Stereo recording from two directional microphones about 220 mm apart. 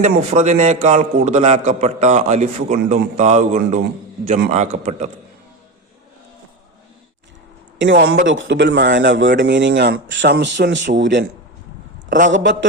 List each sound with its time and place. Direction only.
0.0 s a man's voice: 30° right (ahead or behind)
7.8 s a man's voice: 55° right (ahead or behind)
12.0 s a man's voice: 35° right (ahead or behind)
12.3 s a man's voice: 55° right (ahead or behind)